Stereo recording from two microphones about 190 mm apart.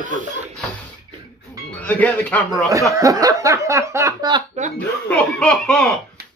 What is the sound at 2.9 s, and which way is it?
Speech, 20° right (ahead or behind).